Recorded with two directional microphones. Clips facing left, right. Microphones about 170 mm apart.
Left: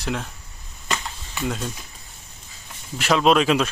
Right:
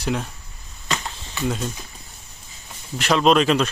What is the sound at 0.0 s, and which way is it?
Speech, centre (ahead or behind).